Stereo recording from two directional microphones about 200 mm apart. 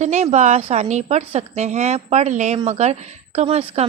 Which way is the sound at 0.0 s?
35° right (ahead or behind).